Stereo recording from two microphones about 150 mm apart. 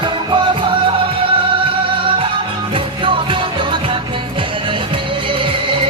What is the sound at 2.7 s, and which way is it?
Music, 35° right (ahead or behind).